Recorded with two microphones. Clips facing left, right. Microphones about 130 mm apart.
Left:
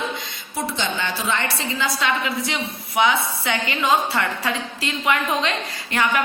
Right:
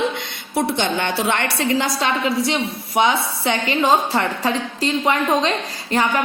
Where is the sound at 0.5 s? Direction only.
55° right (ahead or behind).